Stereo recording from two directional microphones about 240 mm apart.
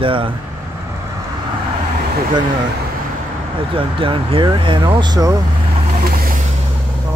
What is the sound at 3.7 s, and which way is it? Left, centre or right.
Speech, right.